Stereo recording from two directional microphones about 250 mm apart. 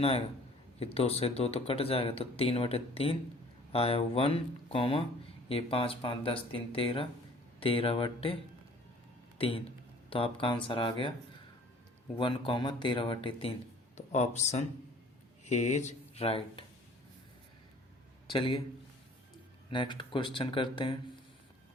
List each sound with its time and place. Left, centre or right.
0.8 s speech: left
9.4 s speech: left
12.1 s speech: centre
18.3 s speech: left
19.7 s speech: centre